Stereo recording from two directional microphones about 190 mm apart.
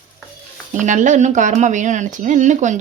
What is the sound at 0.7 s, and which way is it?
Speech, 40° right (ahead or behind).